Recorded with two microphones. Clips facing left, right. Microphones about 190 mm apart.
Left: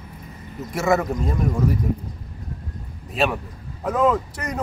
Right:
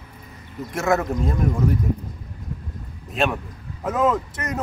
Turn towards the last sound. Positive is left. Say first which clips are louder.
# even
turn(degrees=0)  # may be behind; listen again after turning